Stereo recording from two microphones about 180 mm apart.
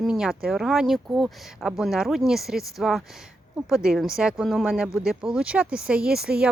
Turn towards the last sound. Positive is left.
turn(degrees=-5)  # may be behind; listen again after turning